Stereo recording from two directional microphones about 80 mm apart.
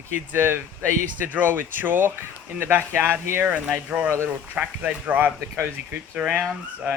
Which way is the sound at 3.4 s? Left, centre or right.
Centre.